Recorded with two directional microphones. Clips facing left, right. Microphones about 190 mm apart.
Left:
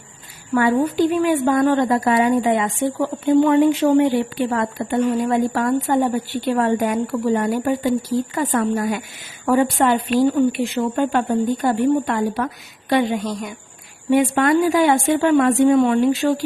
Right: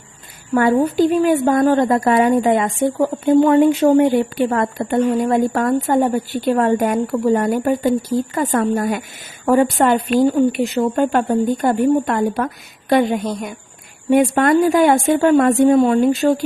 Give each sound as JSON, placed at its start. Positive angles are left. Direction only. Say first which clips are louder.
{"t": 0.5, "sound": "a woman's voice", "louder": "right 2 dB", "side_deg": -40}